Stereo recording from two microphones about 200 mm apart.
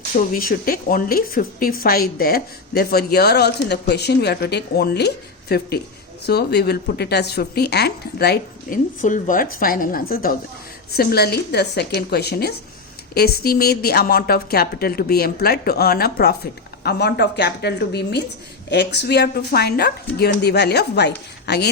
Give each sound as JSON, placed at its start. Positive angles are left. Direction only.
{"t": 0.2, "sound": "a woman's voice", "side_deg": 45}